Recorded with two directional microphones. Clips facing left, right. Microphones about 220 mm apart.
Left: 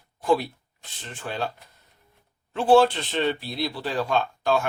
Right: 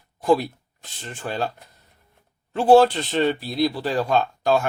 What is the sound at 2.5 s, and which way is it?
Speech, 40° right (ahead or behind).